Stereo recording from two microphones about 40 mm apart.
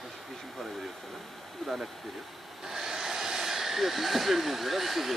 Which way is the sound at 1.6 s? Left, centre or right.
Centre.